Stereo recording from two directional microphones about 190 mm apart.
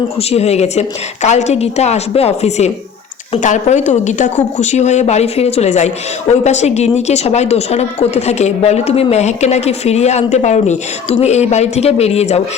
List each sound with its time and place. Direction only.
0.2 s speech: 35° left (ahead or behind)